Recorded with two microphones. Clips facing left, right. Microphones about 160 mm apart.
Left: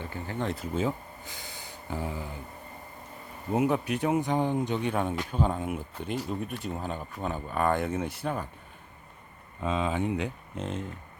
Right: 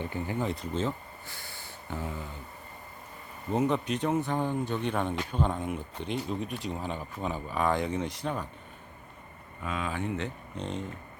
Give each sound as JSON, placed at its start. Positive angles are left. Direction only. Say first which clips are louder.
{"t": 0.0, "sound": "speech", "louder": "right 3 dB", "side_deg": -20}
{"t": 0.3, "sound": "speech", "louder": "left 3 dB", "side_deg": 0}
{"t": 3.5, "sound": "speech", "louder": "left 1 dB", "side_deg": 10}
{"t": 9.6, "sound": "speech", "louder": "left 5 dB", "side_deg": 25}